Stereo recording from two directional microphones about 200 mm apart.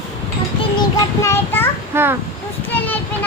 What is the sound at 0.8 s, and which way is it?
Child singing, 15° left (ahead or behind).